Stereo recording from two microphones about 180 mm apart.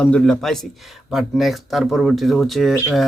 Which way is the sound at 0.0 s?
5° left (ahead or behind).